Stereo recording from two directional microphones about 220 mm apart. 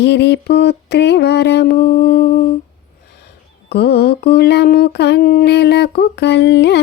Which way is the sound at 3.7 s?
50° left (ahead or behind).